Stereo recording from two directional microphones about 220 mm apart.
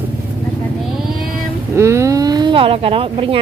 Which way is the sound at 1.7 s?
10° right (ahead or behind).